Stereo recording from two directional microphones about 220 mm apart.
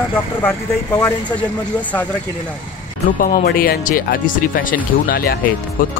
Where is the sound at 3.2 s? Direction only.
40° left (ahead or behind).